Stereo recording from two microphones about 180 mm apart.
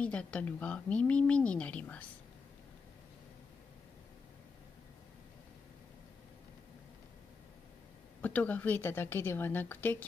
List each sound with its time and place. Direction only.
0.0 s speech: 5° left (ahead or behind)
8.2 s speech: 10° left (ahead or behind)